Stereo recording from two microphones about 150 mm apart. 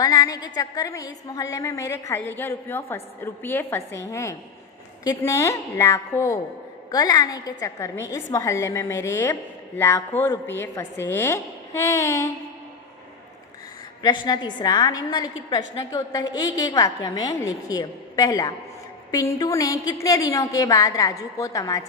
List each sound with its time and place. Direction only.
0.0 s a woman's voice: 25° left (ahead or behind)
14.0 s a woman's voice: 30° left (ahead or behind)